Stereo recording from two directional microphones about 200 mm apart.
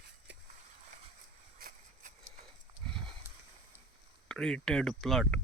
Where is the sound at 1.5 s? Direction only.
45° right (ahead or behind).